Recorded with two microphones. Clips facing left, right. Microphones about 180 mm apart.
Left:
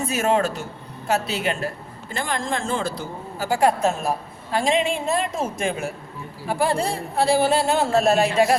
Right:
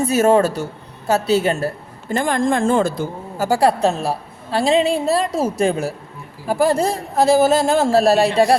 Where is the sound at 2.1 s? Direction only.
50° right (ahead or behind).